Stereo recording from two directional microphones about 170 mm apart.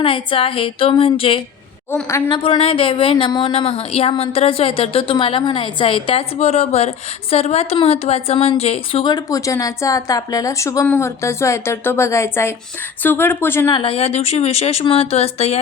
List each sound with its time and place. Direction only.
0.0 s speech: 30° left (ahead or behind)
1.9 s speech: 15° left (ahead or behind)
2.3 s speech: 30° left (ahead or behind); by 13.7 s 15° left (ahead or behind)
13.7 s speech: 30° left (ahead or behind)